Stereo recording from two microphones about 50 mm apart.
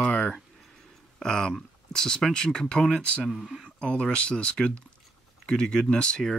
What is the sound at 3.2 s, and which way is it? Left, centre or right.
Speech, centre.